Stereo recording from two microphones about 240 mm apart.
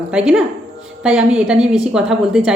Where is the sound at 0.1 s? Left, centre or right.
Centre.